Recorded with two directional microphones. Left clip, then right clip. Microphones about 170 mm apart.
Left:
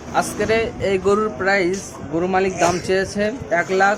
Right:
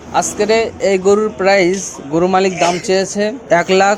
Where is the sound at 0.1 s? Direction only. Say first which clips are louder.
Right 5 dB; 25° right (ahead or behind).